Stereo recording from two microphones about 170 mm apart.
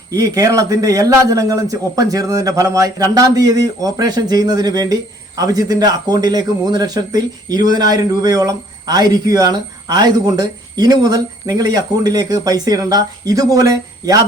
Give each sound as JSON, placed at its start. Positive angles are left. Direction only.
{"t": 0.1, "sound": "speech", "side_deg": -20}